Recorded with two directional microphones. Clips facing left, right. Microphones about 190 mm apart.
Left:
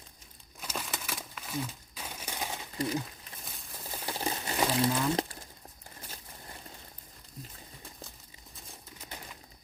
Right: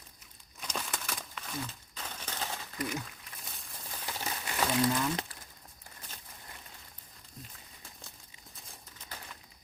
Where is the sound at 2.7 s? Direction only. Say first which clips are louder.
Left 5 dB; 30° left (ahead or behind).